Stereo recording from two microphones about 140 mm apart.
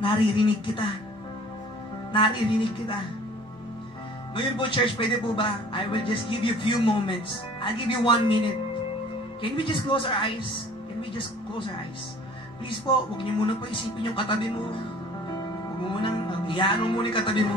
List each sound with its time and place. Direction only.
0.0 s a man's voice: 40° left (ahead or behind)
2.1 s a man's voice: 35° left (ahead or behind)
4.4 s a man's voice: 35° left (ahead or behind)
15.8 s a man's voice: 35° left (ahead or behind)